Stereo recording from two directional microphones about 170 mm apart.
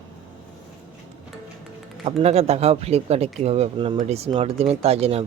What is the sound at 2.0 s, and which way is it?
Speech, 35° right (ahead or behind).